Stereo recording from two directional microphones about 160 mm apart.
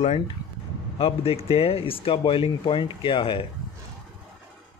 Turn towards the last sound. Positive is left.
turn(degrees=30)  # may be behind; listen again after turning